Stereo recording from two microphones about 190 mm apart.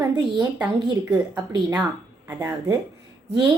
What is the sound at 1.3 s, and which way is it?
A child's voice, 20° right (ahead or behind).